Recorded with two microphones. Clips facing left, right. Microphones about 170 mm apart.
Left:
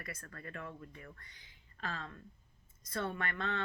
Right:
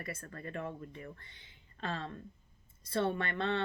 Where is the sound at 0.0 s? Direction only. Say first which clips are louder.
Right 5 dB; 25° right (ahead or behind).